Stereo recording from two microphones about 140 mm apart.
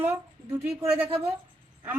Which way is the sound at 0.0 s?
15° right (ahead or behind).